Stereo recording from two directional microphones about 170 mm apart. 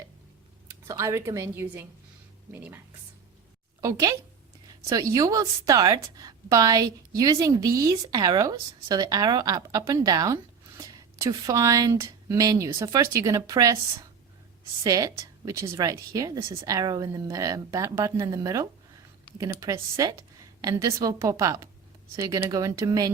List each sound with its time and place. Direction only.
0.9 s a woman's voice: 20° right (ahead or behind)